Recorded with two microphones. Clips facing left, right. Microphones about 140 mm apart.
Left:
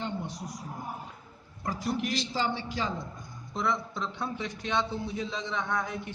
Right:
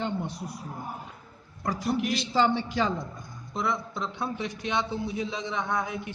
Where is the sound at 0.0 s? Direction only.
60° right (ahead or behind).